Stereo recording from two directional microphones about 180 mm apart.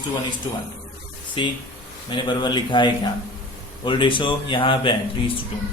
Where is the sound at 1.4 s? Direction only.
25° left (ahead or behind).